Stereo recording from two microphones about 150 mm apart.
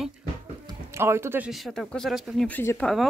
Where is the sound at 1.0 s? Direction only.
15° right (ahead or behind).